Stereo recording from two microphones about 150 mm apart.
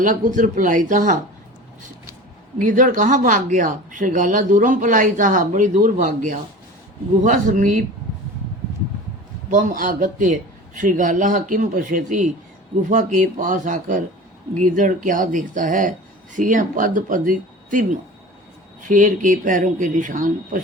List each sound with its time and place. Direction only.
0.0 s speech: 60° right (ahead or behind)
2.6 s speech: 60° right (ahead or behind)
9.5 s speech: 60° right (ahead or behind)